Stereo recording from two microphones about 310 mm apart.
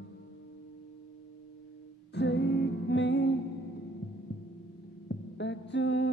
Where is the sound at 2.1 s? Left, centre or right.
Left.